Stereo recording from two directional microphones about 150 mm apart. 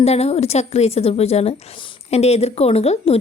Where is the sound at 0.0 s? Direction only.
45° left (ahead or behind).